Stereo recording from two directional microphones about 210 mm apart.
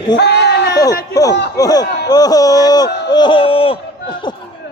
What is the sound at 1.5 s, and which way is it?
Speech, 15° left (ahead or behind).